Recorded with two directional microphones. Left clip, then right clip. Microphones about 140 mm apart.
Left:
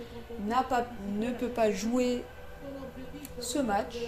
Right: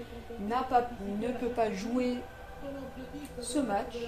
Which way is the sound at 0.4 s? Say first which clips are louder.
Even; 65° left (ahead or behind).